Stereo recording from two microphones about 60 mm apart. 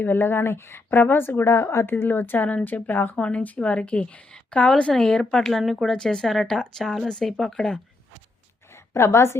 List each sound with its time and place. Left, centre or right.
0.0 s a woman's voice: left
3.2 s a woman's voice: centre
9.0 s a woman's voice: left